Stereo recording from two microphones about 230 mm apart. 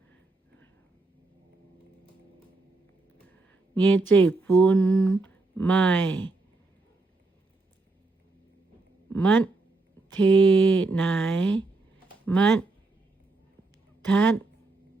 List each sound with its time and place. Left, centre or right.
3.8 s speech: centre
9.0 s a sound: centre
10.2 s speech: centre
14.1 s speech: centre